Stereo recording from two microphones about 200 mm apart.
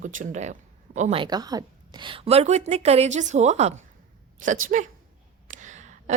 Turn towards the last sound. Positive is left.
turn(degrees=-35)  # may be behind; listen again after turning